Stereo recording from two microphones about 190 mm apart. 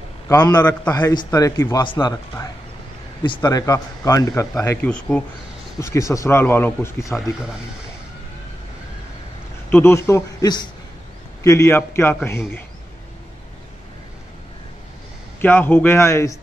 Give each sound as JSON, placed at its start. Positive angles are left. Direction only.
{"t": 0.3, "sound": "a man's voice", "side_deg": 20}
{"t": 9.7, "sound": "a man's voice", "side_deg": 10}
{"t": 15.4, "sound": "a man's voice", "side_deg": 10}